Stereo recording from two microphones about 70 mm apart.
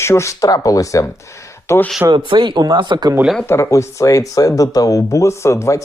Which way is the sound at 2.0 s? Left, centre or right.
Right.